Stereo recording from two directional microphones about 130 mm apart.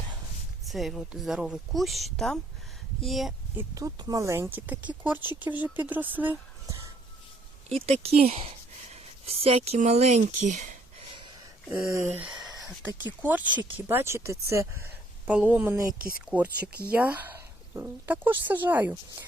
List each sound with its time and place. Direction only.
0.6 s speech: centre (ahead or behind)
3.6 s speech: 25° right (ahead or behind)
7.7 s speech: 50° right (ahead or behind)
9.7 s speech: 60° right (ahead or behind)
11.7 s speech: 15° right (ahead or behind)
15.3 s speech: 10° right (ahead or behind)